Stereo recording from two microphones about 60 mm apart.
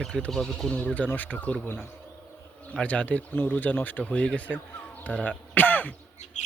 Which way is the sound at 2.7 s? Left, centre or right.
Left.